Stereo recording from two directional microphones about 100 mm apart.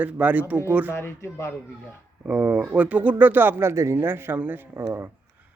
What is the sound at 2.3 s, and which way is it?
Speech, 15° right (ahead or behind).